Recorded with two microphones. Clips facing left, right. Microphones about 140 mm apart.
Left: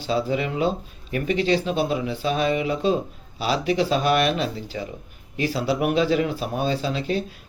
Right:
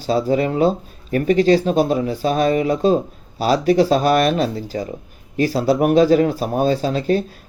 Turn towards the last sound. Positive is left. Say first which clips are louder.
# right 6 dB
turn(degrees=-45)  # may be behind; listen again after turning